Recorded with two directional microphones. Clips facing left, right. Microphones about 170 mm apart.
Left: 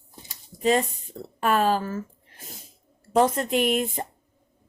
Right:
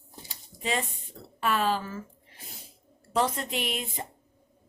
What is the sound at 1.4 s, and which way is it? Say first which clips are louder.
Speech: left 5 dB; 45° left (ahead or behind).